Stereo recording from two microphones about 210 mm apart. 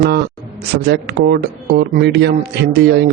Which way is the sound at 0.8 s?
50° right (ahead or behind).